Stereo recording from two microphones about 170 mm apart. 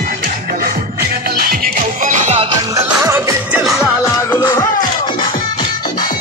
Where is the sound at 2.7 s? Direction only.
15° right (ahead or behind).